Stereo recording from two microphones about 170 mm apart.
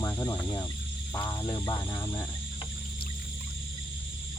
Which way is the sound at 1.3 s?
25° left (ahead or behind).